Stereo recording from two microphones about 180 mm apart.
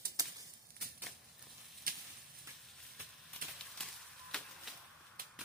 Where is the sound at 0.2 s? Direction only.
20° right (ahead or behind).